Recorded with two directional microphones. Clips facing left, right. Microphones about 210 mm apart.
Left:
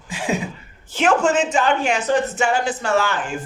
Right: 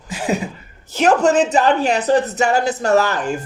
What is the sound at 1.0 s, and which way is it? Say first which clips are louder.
Speech: right 3 dB; 40° right (ahead or behind).